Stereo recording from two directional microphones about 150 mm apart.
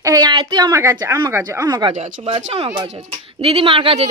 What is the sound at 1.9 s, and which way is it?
Speech, 45° right (ahead or behind).